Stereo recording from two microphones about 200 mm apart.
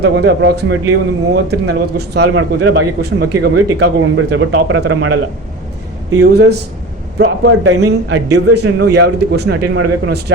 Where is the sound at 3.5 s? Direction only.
90° right; by 5.2 s 70° right (ahead or behind).